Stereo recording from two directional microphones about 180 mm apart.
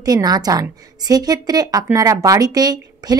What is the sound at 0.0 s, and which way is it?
A woman's voice, 20° right (ahead or behind).